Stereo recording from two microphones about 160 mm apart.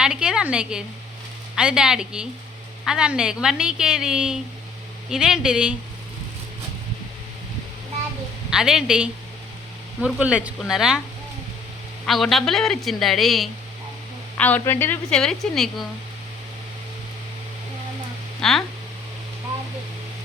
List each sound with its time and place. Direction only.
0.0 s a woman's voice: 5° right (ahead or behind)
8.4 s a woman's voice: 5° right (ahead or behind)
12.0 s a woman's voice: centre (ahead or behind)
18.3 s speech: centre (ahead or behind)